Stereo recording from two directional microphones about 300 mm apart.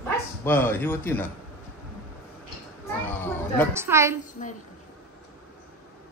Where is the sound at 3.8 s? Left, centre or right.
Centre.